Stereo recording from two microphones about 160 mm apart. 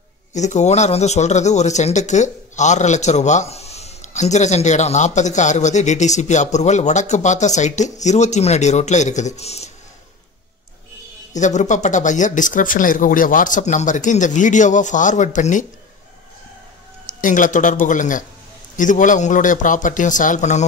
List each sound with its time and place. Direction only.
0.3 s speech: 45° left (ahead or behind)
11.3 s speech: 50° left (ahead or behind)
17.0 s speech: 55° left (ahead or behind)